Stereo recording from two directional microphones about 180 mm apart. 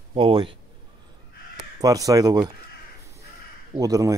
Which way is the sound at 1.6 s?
20° right (ahead or behind).